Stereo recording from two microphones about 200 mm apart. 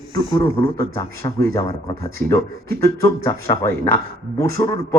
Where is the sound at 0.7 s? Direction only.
15° left (ahead or behind).